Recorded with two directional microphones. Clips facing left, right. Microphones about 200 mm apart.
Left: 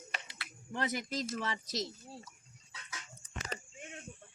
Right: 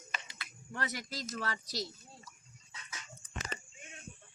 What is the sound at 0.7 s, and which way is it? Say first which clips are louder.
Speech: left 4 dB; 30° left (ahead or behind).